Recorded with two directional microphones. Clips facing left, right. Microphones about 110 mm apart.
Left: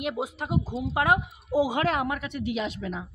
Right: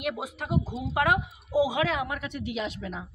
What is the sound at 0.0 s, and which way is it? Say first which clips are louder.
Speech: left 2 dB; 25° left (ahead or behind).